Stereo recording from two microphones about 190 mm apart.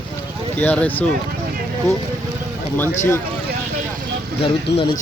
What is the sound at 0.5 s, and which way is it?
Speech, 10° left (ahead or behind).